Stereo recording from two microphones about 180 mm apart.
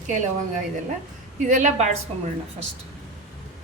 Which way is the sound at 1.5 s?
45° right (ahead or behind).